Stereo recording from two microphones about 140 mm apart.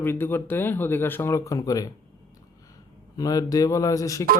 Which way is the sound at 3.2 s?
25° left (ahead or behind).